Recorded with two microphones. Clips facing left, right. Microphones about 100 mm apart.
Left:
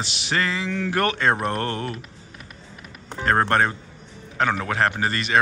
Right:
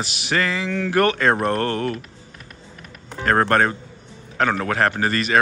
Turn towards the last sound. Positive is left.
turn(degrees=25)  # may be behind; listen again after turning